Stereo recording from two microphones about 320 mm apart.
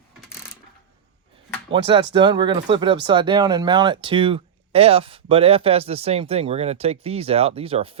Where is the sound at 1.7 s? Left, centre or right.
Centre.